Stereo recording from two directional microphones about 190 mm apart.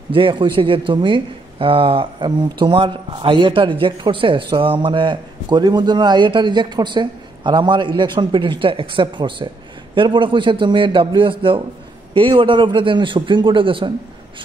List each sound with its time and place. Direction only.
0.1 s speech: 25° right (ahead or behind)